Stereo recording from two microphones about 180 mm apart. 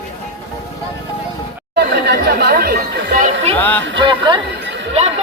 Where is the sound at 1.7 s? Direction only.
60° right (ahead or behind); by 3.5 s 45° right (ahead or behind).